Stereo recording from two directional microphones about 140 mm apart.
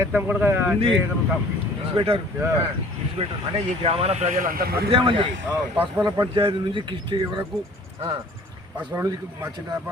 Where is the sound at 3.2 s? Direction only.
45° right (ahead or behind).